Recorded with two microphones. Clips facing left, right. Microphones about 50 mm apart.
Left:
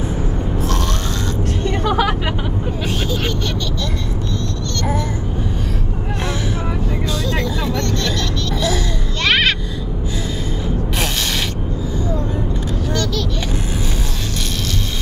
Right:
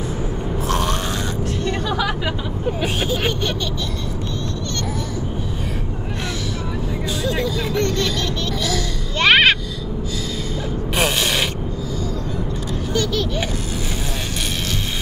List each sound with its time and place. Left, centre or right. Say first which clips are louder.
1.6 s music: left 5 dB; left
2.8 s vehicle: right 1 dB; centre
7.7 s vehicle: right 1 dB; centre
9.2 s a sound: right 3 dB; right
12.9 s vehicle: right 2 dB; centre